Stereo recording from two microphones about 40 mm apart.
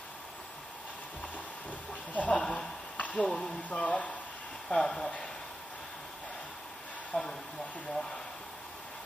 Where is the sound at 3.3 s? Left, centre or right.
Centre.